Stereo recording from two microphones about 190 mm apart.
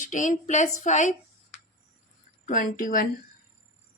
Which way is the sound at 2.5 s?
45° left (ahead or behind).